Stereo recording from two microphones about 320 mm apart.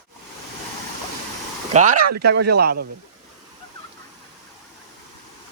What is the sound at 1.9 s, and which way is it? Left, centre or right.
Speech, right.